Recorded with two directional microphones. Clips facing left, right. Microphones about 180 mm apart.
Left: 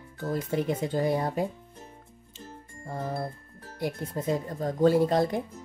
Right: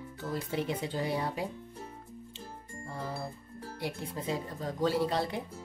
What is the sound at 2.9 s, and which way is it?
Speech, 45° left (ahead or behind).